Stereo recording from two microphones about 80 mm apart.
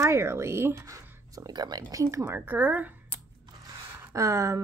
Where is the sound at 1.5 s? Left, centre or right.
Right.